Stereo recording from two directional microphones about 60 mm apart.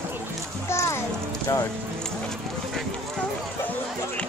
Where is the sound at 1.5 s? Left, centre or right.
Left.